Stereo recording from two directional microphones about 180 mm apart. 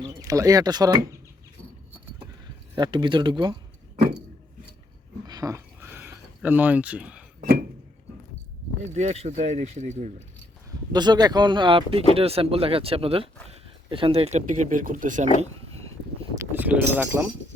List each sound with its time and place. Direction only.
0.0 s speech: 20° right (ahead or behind)
2.7 s speech: 25° right (ahead or behind)
5.2 s a sound: 20° right (ahead or behind)
8.8 s speech: 40° right (ahead or behind)
10.9 s speech: 25° right (ahead or behind)
16.3 s a sound: 15° right (ahead or behind)